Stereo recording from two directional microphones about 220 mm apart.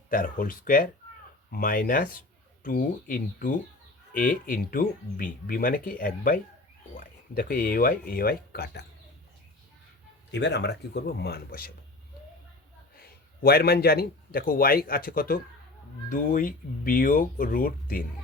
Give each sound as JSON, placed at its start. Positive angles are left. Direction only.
{"t": 0.1, "sound": "speech", "side_deg": 40}
{"t": 10.3, "sound": "speech", "side_deg": 50}
{"t": 13.0, "sound": "a man's voice", "side_deg": 45}